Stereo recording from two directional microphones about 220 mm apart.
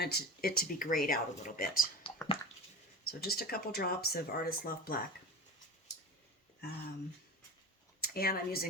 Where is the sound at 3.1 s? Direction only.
45° left (ahead or behind).